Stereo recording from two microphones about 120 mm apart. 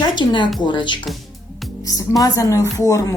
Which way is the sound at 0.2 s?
40° left (ahead or behind).